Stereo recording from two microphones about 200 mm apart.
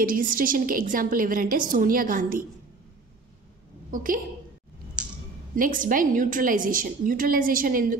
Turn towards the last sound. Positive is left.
turn(degrees=-45)  # may be behind; listen again after turning